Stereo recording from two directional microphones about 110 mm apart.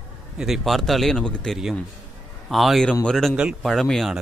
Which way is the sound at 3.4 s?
10° right (ahead or behind).